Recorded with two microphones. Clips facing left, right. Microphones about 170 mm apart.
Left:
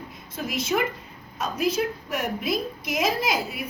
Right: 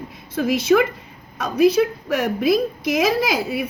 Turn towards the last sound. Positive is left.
turn(degrees=-70)  # may be behind; listen again after turning